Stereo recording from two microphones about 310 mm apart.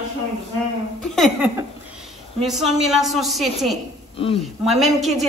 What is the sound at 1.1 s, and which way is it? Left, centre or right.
A man's voice, centre.